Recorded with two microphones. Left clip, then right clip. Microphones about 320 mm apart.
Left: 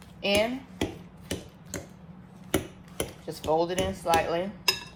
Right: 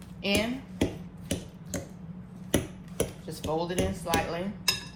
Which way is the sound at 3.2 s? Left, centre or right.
Left.